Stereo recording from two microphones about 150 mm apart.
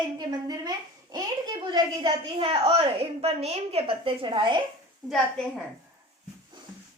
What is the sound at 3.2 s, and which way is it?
A woman's voice, 45° right (ahead or behind).